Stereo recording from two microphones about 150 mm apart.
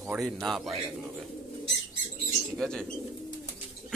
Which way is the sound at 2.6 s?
5° left (ahead or behind).